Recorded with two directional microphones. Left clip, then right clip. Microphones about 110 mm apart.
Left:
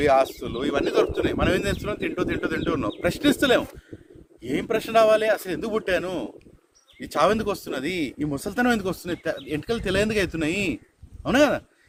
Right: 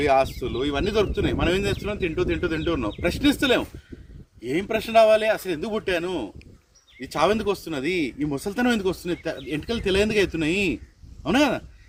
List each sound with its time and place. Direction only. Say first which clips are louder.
0.0 s speech: left 1 dB; 50° left (ahead or behind)